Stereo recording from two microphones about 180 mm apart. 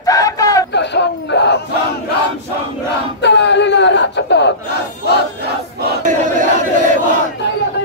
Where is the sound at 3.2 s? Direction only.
75° left (ahead or behind).